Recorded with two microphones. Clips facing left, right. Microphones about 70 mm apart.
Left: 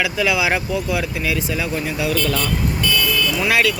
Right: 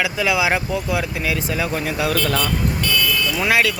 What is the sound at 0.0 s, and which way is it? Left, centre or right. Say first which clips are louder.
Speech: even; right.